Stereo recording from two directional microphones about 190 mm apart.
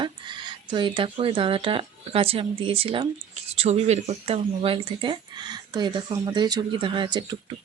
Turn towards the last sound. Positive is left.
turn(degrees=-25)  # may be behind; listen again after turning